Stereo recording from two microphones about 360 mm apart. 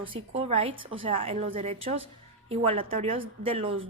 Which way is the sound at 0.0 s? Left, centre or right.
Centre.